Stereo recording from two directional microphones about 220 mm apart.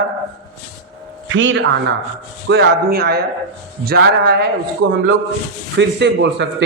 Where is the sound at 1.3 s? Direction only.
60° right (ahead or behind).